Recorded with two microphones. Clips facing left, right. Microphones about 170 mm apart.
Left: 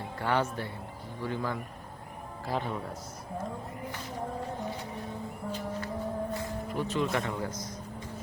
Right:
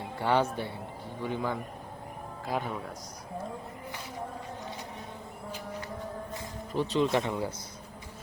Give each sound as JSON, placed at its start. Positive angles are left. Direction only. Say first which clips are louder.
{"t": 0.2, "sound": "speech", "louder": "right 3 dB", "side_deg": -20}
{"t": 6.3, "sound": "speech", "louder": "even", "side_deg": -20}